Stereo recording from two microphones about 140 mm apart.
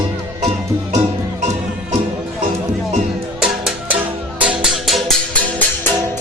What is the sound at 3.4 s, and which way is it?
Music, 5° right (ahead or behind).